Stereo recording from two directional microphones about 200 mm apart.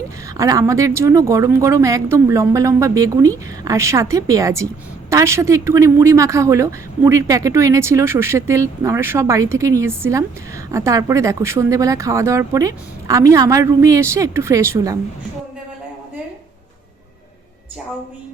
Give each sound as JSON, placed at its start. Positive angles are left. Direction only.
{"t": 0.3, "sound": "a woman's voice", "side_deg": -15}